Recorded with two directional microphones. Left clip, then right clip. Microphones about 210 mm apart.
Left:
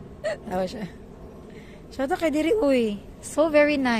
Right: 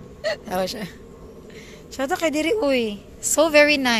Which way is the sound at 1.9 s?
5° left (ahead or behind).